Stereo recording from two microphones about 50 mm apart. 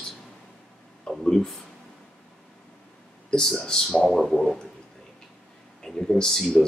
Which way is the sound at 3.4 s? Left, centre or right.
Centre.